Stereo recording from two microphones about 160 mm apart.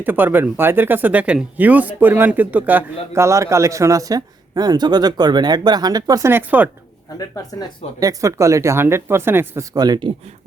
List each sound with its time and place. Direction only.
0.0 s speech: 10° right (ahead or behind)
7.2 s speech: 20° left (ahead or behind)
7.9 s speech: 20° right (ahead or behind)